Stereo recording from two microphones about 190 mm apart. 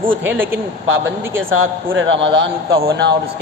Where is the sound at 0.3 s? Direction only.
10° right (ahead or behind).